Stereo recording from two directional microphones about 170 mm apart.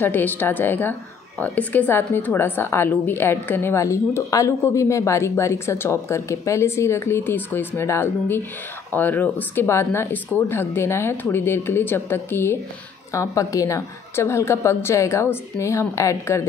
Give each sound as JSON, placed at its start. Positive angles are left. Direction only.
{"t": 0.0, "sound": "a woman's voice", "side_deg": 10}